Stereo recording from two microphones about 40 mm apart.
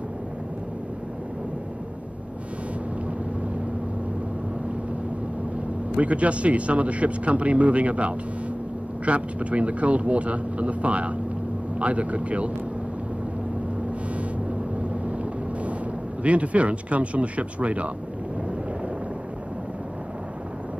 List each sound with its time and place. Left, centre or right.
5.9 s speech: right
14.5 s vehicle: right
16.2 s speech: right